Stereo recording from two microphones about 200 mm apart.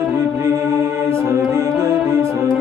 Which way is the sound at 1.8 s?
15° right (ahead or behind).